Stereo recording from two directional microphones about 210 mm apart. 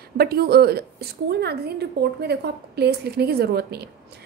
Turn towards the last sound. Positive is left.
turn(degrees=-50)  # may be behind; listen again after turning